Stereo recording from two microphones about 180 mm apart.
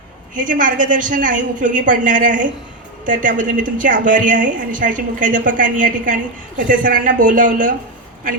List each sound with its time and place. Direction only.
0.3 s a woman's voice: 45° right (ahead or behind)